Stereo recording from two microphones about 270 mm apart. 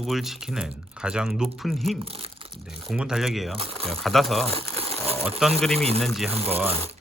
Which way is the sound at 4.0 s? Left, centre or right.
Centre.